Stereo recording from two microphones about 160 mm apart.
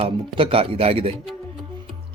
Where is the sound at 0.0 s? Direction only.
35° right (ahead or behind).